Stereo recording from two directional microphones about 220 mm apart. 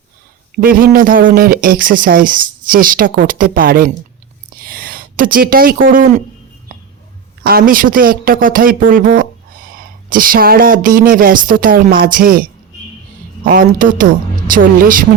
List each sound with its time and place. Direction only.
0.5 s speech: 40° right (ahead or behind)
7.4 s speech: 40° right (ahead or behind)